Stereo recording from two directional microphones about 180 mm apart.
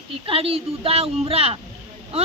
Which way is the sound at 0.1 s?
30° right (ahead or behind).